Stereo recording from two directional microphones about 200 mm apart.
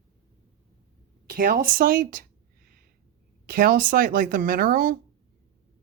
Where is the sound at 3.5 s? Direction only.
45° right (ahead or behind).